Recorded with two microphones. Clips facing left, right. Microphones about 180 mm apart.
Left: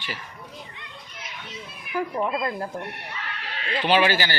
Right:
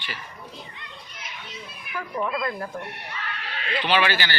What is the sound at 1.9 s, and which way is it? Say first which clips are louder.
Speech: left 3 dB; 30° left (ahead or behind).